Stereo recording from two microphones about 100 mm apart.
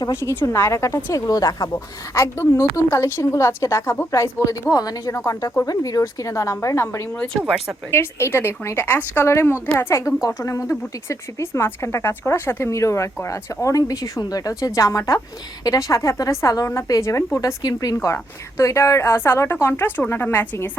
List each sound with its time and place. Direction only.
0.1 s a woman's voice: 25° left (ahead or behind)
7.3 s speech: 5° right (ahead or behind)
7.9 s a woman's voice: 25° left (ahead or behind)
17.9 s a woman's voice: 30° left (ahead or behind)